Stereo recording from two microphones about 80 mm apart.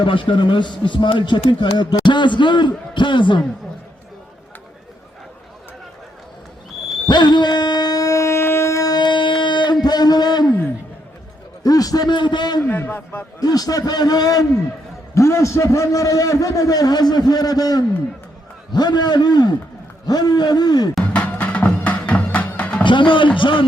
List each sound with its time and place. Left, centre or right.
0.0 s a man's voice: left
7.1 s a sound: left
8.9 s music: left
9.8 s a sound: left
11.6 s a man's voice: left
12.6 s a man's voice: left
13.4 s a man's voice: left
18.7 s a man's voice: left
21.0 s music: centre
22.8 s a man's voice: left